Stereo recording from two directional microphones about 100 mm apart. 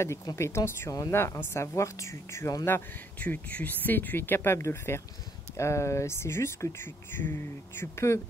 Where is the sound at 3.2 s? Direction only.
15° left (ahead or behind).